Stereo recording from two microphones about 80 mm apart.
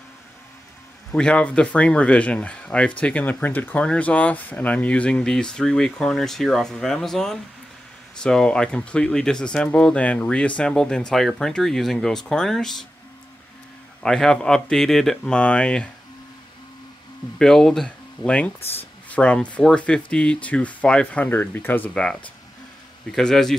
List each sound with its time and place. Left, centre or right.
1.1 s speech: centre
14.0 s speech: centre
17.4 s speech: centre
21.3 s speech: left
21.9 s speech: centre